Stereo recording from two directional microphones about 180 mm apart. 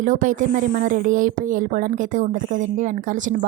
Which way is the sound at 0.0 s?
45° right (ahead or behind).